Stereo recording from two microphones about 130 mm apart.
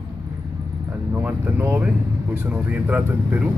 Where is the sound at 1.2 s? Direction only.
15° right (ahead or behind).